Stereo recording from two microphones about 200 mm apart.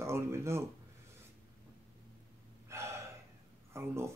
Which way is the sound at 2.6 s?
15° right (ahead or behind).